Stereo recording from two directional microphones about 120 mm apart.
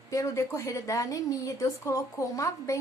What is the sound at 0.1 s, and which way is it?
A woman's voice, 25° left (ahead or behind).